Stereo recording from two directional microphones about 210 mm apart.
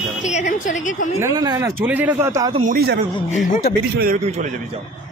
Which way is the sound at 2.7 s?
50° right (ahead or behind).